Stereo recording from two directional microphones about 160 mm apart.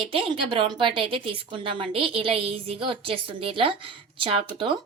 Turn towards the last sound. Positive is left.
turn(degrees=-35)  # may be behind; listen again after turning